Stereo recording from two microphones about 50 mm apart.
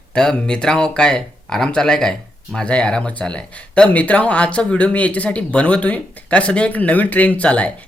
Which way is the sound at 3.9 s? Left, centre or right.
Left.